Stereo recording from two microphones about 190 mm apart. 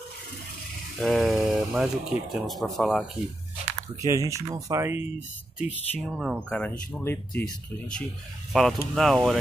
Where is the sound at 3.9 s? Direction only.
15° right (ahead or behind).